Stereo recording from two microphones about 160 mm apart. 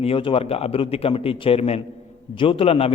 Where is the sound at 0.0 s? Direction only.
35° left (ahead or behind).